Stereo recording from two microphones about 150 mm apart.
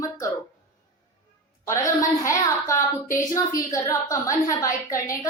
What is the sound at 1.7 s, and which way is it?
A woman's voice, 20° left (ahead or behind).